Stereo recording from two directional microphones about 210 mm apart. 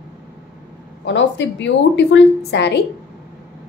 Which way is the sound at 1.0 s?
60° left (ahead or behind).